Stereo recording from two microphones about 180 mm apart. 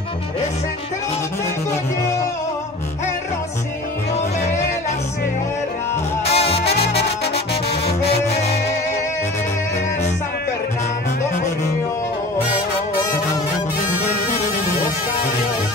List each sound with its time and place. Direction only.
6.2 s music: 35° left (ahead or behind)